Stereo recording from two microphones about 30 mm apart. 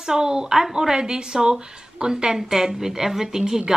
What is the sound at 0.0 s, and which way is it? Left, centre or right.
Speech, right.